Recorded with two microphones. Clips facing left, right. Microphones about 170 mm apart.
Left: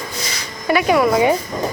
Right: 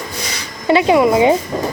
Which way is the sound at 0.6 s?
25° right (ahead or behind).